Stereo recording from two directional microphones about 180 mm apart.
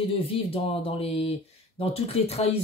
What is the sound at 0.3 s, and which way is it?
Speech, 30° left (ahead or behind).